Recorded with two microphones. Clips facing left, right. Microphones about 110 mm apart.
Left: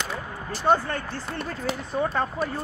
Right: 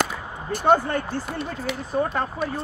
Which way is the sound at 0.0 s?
50° right (ahead or behind).